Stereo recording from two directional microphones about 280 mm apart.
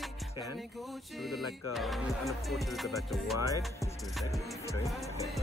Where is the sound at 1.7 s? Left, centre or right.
Centre.